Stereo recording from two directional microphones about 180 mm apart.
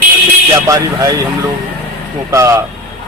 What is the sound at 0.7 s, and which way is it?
Speech, 20° right (ahead or behind).